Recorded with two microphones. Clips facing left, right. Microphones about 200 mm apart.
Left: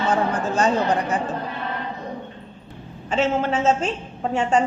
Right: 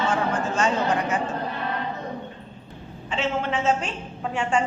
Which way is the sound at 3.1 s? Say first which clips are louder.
Left 5 dB; 40° left (ahead or behind).